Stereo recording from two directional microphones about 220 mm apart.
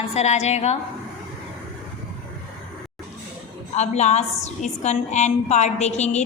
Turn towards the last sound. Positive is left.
turn(degrees=30)  # may be behind; listen again after turning